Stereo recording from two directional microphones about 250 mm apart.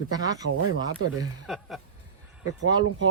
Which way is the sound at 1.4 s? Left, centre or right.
Centre.